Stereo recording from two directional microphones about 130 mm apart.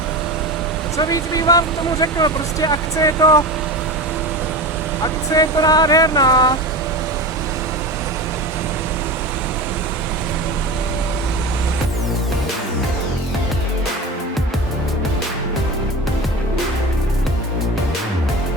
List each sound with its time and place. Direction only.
0.9 s speech: 30° left (ahead or behind)
5.3 s speech: 30° left (ahead or behind)